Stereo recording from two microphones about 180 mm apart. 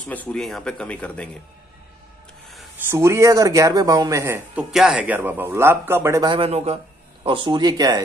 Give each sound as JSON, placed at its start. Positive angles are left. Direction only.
{"t": 0.0, "sound": "speech", "side_deg": 10}
{"t": 2.9, "sound": "speech", "side_deg": -15}
{"t": 6.3, "sound": "speech", "side_deg": -35}